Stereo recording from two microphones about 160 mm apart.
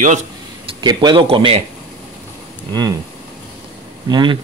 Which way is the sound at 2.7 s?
25° right (ahead or behind).